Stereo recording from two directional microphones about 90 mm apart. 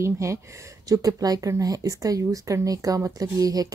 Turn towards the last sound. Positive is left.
turn(degrees=-45)  # may be behind; listen again after turning